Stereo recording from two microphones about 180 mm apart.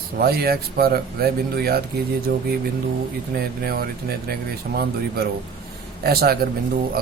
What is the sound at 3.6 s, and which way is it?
Speech, 60° right (ahead or behind).